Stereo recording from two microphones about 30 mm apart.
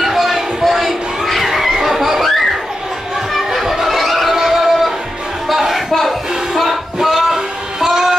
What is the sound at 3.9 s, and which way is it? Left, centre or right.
Music, centre.